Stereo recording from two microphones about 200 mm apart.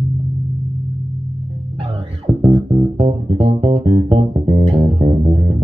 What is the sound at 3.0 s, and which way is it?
Music, 30° right (ahead or behind).